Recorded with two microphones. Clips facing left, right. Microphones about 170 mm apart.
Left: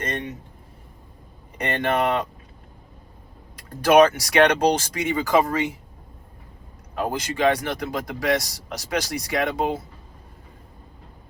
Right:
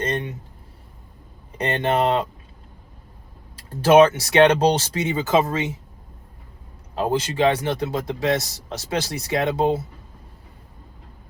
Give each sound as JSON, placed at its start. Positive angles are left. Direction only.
{"t": 1.5, "sound": "speech", "side_deg": -25}
{"t": 3.5, "sound": "speech", "side_deg": -30}
{"t": 6.9, "sound": "speech", "side_deg": -25}